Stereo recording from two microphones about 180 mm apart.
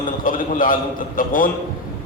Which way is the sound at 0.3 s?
50° left (ahead or behind).